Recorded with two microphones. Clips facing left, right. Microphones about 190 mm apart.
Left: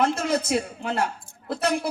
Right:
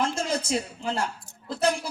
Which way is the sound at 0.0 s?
60° left (ahead or behind).